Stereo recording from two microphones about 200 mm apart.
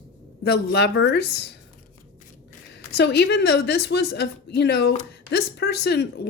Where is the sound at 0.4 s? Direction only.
55° left (ahead or behind).